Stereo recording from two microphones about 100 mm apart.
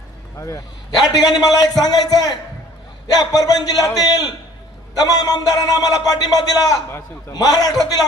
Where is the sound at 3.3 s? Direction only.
40° left (ahead or behind).